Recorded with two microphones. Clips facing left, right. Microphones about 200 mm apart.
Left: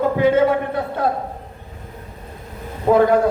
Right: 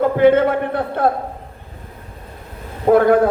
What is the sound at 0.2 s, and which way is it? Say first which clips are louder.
Speech: right 4 dB; 55° right (ahead or behind).